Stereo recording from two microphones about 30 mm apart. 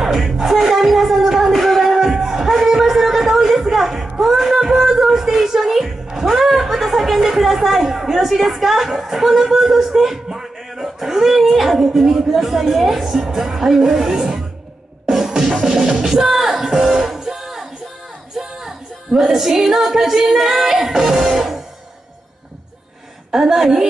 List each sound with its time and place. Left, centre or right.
0.0 s music: centre
1.5 s music: centre
2.0 s music: centre
4.2 s a woman's voice: centre
15.0 s music: centre
15.6 s speech: centre
15.9 s music: right
16.2 s music: centre
19.2 s speech: centre
23.3 s speech: centre